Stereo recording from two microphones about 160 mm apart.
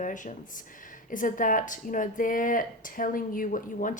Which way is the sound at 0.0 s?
50° left (ahead or behind).